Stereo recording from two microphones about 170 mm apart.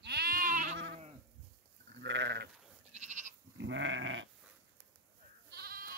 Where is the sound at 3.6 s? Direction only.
90° right.